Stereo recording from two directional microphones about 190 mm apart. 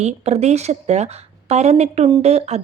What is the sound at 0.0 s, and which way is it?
A woman's voice, 35° right (ahead or behind).